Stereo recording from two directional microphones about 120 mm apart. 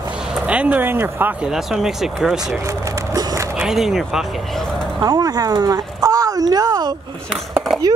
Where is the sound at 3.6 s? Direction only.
5° right (ahead or behind).